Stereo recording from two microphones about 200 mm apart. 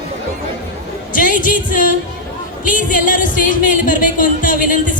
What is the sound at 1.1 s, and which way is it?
Music, 40° left (ahead or behind).